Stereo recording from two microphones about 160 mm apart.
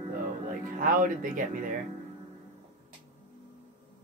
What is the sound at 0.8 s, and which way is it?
Speech, 60° right (ahead or behind).